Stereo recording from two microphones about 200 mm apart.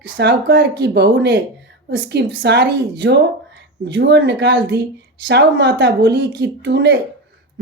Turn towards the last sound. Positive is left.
turn(degrees=-60)  # may be behind; listen again after turning